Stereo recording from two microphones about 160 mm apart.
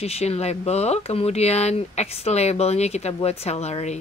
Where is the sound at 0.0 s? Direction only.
40° left (ahead or behind).